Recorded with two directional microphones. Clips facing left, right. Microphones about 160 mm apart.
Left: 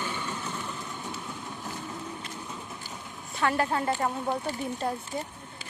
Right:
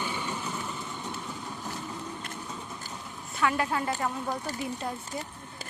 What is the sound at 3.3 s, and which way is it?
A woman's voice, 40° left (ahead or behind).